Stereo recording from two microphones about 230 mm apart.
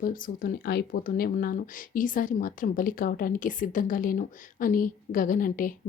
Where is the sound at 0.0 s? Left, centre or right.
Left.